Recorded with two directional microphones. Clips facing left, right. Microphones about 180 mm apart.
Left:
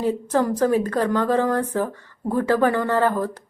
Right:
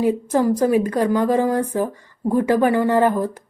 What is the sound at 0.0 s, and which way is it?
A woman's voice, 15° right (ahead or behind).